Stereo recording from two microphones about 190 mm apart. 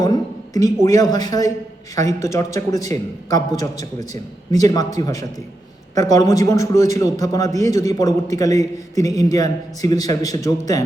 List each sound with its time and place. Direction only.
0.0 s a man's voice: 20° left (ahead or behind)